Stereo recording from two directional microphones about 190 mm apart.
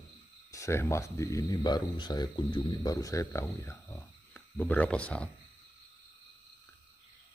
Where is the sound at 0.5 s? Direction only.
15° left (ahead or behind).